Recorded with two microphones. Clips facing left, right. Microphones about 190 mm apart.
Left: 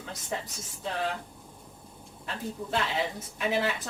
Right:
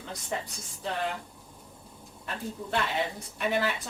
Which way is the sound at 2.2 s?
Centre (ahead or behind).